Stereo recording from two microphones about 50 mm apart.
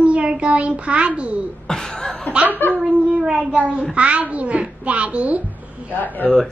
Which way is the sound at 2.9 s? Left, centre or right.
Right.